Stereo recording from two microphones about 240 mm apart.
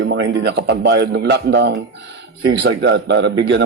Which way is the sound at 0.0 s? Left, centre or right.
Right.